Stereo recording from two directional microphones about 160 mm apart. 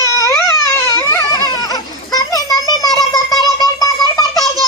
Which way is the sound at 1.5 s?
25° left (ahead or behind).